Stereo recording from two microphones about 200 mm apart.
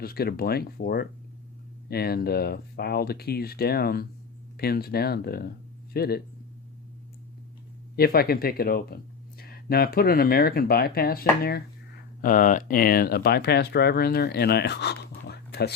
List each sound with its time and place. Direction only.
0.0 s speech: 50° left (ahead or behind)
7.9 s speech: 50° left (ahead or behind)